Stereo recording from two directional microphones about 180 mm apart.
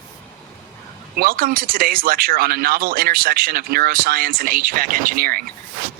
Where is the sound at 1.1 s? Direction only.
55° right (ahead or behind).